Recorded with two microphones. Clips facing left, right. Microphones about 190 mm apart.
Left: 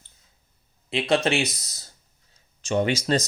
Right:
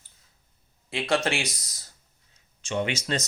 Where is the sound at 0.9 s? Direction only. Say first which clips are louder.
Left 4 dB; 20° left (ahead or behind).